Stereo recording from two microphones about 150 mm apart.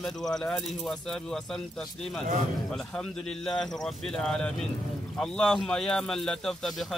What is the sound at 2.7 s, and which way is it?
Speech, 5° left (ahead or behind).